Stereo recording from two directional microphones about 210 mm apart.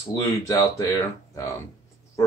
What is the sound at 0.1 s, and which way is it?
Speech, 15° left (ahead or behind).